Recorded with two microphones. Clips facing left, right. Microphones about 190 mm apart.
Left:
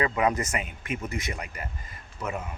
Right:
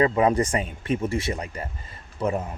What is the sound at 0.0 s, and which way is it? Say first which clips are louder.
Speech: right 5 dB; 30° right (ahead or behind).